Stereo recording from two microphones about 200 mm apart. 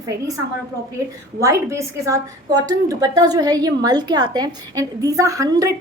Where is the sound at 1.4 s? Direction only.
15° right (ahead or behind).